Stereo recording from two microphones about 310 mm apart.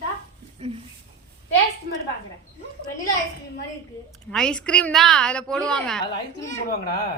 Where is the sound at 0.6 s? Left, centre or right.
Right.